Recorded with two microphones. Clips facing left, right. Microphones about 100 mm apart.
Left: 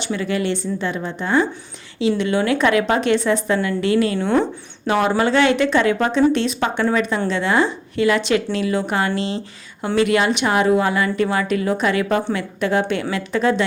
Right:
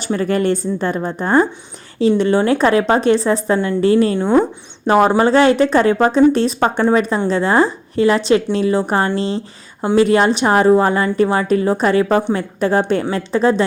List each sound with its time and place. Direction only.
0.0 s a woman's voice: 40° right (ahead or behind)
4.2 s speech: 15° right (ahead or behind)
4.9 s a woman's voice: 40° right (ahead or behind)